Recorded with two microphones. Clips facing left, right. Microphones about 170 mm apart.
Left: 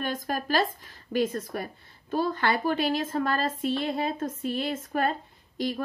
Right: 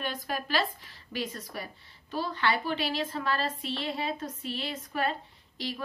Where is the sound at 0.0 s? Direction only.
45° left (ahead or behind).